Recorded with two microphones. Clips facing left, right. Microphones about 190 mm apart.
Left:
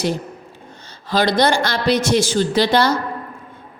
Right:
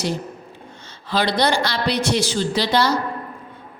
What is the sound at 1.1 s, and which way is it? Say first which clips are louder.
A woman's voice: left 3 dB; 45° left (ahead or behind).